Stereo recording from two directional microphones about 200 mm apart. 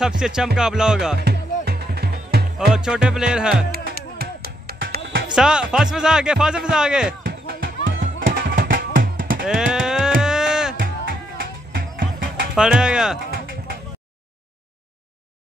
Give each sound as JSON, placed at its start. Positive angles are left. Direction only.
{"t": 0.2, "sound": "speech", "side_deg": -5}
{"t": 1.1, "sound": "music", "side_deg": -55}
{"t": 2.7, "sound": "speech", "side_deg": -5}
{"t": 3.7, "sound": "music", "side_deg": -50}
{"t": 5.3, "sound": "speech", "side_deg": -5}
{"t": 7.2, "sound": "music", "side_deg": -50}
{"t": 9.4, "sound": "speech", "side_deg": -5}
{"t": 10.2, "sound": "a sound", "side_deg": -5}
{"t": 10.8, "sound": "music", "side_deg": -45}
{"t": 12.5, "sound": "speech", "side_deg": -5}